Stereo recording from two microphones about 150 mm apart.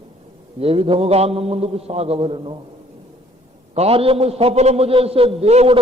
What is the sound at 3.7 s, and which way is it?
A man's voice, 40° right (ahead or behind).